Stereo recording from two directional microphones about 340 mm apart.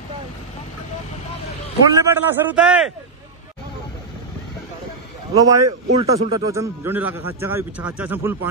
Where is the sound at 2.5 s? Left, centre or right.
Centre.